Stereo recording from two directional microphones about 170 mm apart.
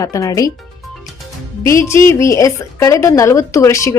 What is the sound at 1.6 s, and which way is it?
Speech, 15° left (ahead or behind).